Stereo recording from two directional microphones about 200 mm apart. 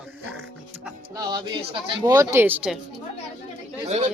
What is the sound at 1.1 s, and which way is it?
Speech, 20° right (ahead or behind).